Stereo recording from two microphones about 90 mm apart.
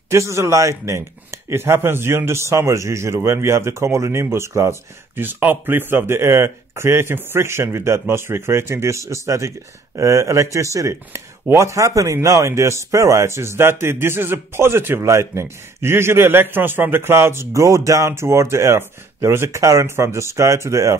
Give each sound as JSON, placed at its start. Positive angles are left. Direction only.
{"t": 0.1, "sound": "speech", "side_deg": -30}